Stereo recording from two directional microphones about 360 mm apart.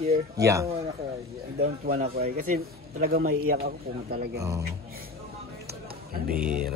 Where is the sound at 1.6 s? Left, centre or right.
Right.